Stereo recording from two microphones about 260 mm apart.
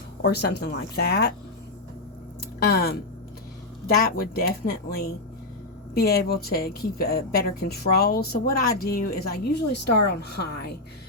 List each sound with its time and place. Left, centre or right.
0.2 s a woman's voice: left
2.6 s a woman's voice: left
4.0 s a woman's voice: left